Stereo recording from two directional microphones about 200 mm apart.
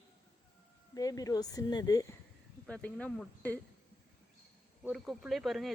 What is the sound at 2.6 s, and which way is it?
Speech, 5° left (ahead or behind).